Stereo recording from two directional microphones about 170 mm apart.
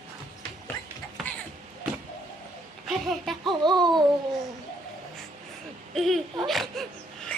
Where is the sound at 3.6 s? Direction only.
25° right (ahead or behind).